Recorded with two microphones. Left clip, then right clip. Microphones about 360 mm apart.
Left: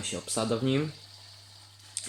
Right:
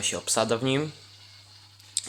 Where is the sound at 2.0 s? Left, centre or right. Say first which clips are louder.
Right 7 dB; centre.